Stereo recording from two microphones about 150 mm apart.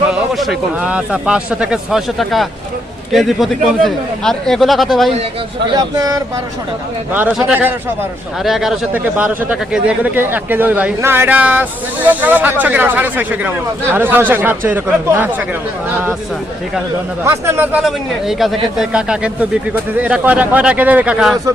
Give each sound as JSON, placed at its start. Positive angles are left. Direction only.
{"t": 0.1, "sound": "speech", "side_deg": -5}
{"t": 5.7, "sound": "speech", "side_deg": -25}
{"t": 7.1, "sound": "speech", "side_deg": -10}
{"t": 17.2, "sound": "speech", "side_deg": -15}
{"t": 17.8, "sound": "speech", "side_deg": 0}